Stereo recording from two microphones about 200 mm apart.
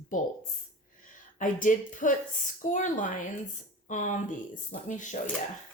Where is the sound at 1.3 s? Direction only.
40° left (ahead or behind).